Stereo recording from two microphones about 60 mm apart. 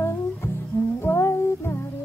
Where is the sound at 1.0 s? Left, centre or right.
Left.